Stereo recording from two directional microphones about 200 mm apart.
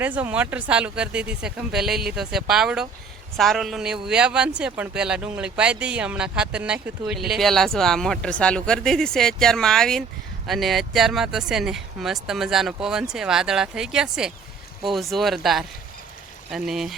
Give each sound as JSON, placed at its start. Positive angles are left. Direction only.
{"t": 0.0, "sound": "a man's voice", "side_deg": -10}